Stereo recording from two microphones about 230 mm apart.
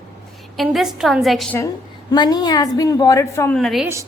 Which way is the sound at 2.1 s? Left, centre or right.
Centre.